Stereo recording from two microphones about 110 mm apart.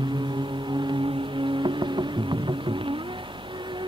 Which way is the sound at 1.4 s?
50° right (ahead or behind).